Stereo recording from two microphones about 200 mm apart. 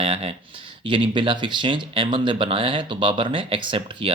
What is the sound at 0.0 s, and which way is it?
Speech, 30° right (ahead or behind).